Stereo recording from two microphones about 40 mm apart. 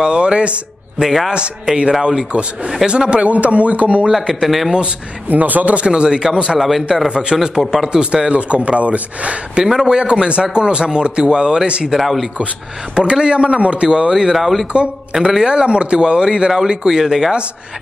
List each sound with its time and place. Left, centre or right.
0.0 s speech: right
0.9 s speech: centre
1.8 s speech: centre
3.3 s speech: right
4.1 s speech: centre
5.3 s speech: right
5.8 s a man's voice: right
8.0 s speech: right
9.8 s speech: right
12.0 s speech: centre
12.9 s speech: right
14.3 s speech: centre
15.2 s speech: right